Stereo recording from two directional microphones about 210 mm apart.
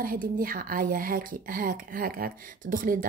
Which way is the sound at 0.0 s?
45° right (ahead or behind).